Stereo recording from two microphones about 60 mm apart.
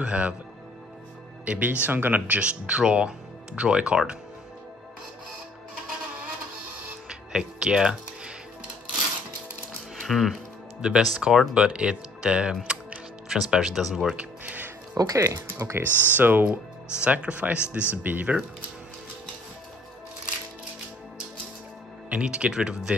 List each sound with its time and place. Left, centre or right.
0.0 s speech: right
1.4 s speech: right
7.1 s music: centre
10.0 s speech: centre
10.8 s speech: centre
14.1 s music: right
15.0 s speech: right
15.6 s speech: right
15.9 s speech: left
16.2 s speech: right
22.1 s speech: centre